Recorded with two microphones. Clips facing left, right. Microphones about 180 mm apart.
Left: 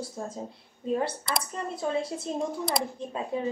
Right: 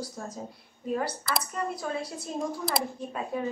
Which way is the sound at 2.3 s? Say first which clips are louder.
Even; 25° left (ahead or behind).